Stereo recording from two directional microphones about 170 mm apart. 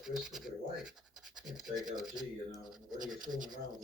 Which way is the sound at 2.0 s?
Centre (ahead or behind).